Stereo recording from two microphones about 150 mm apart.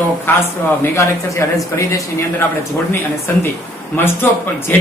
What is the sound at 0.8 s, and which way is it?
Speech, 20° left (ahead or behind).